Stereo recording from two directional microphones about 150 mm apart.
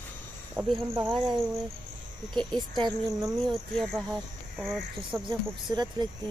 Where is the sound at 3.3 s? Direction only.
Centre (ahead or behind).